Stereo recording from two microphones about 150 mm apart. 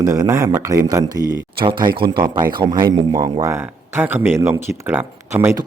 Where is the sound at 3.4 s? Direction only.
15° right (ahead or behind).